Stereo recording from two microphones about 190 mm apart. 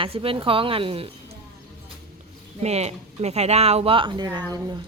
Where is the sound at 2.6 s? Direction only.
35° right (ahead or behind).